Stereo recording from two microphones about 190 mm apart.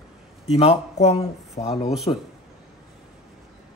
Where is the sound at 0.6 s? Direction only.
30° left (ahead or behind).